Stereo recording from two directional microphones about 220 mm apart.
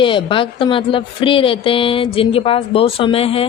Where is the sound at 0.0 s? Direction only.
20° left (ahead or behind).